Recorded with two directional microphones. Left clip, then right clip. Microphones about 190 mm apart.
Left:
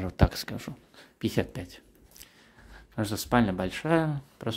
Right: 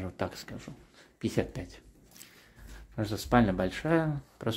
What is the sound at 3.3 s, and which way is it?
Speech, 5° left (ahead or behind).